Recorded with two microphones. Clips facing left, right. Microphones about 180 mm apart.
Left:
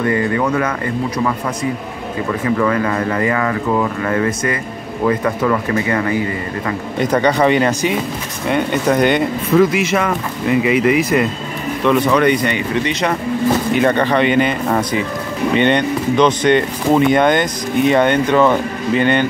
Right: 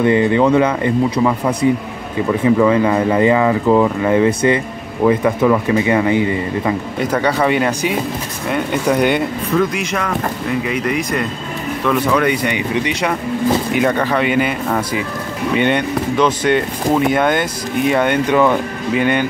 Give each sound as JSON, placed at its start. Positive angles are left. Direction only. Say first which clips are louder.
{"t": 0.0, "sound": "speech", "louder": "right 4 dB", "side_deg": -20}
{"t": 2.4, "sound": "speech", "louder": "right 4 dB", "side_deg": -15}
{"t": 7.0, "sound": "speech", "louder": "left 4 dB", "side_deg": -5}
{"t": 9.6, "sound": "speech", "louder": "left 5 dB", "side_deg": 5}
{"t": 15.5, "sound": "speech", "louder": "left 1 dB", "side_deg": -5}